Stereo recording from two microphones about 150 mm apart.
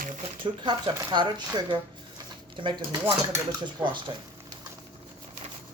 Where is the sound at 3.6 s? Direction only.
30° right (ahead or behind).